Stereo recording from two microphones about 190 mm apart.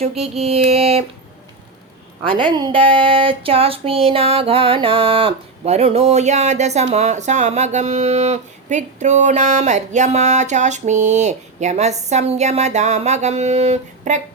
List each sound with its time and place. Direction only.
0.2 s speech: 30° right (ahead or behind)
2.2 s speech: 25° right (ahead or behind)